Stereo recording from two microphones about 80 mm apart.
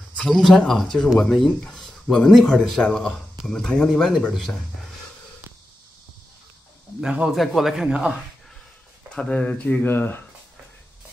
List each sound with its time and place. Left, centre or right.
0.2 s speech: centre
7.0 s speech: centre
9.1 s speech: centre